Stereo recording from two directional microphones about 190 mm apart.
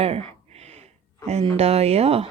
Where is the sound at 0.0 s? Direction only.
30° right (ahead or behind).